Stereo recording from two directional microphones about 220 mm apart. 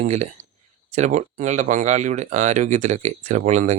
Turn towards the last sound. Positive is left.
turn(degrees=-30)  # may be behind; listen again after turning